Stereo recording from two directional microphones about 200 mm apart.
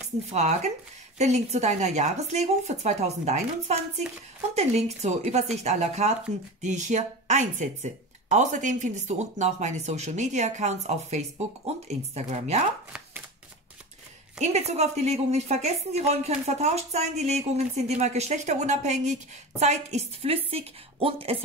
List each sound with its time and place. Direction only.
0.3 s speech: 35° right (ahead or behind)
14.4 s a woman's voice: 35° right (ahead or behind)